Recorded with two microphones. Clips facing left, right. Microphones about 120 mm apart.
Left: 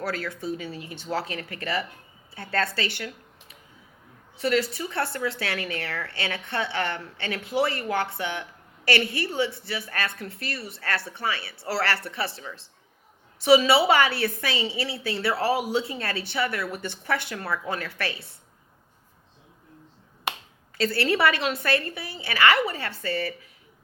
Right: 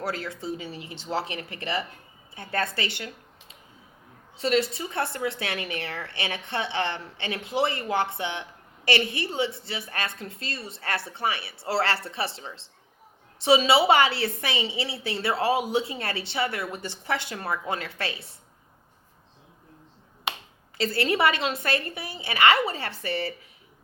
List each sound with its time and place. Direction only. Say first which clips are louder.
0.0 s a woman's voice: left 1 dB; 25° right (ahead or behind)
4.4 s a woman's voice: even; 25° right (ahead or behind)
20.7 s a woman's voice: left 1 dB; 25° right (ahead or behind)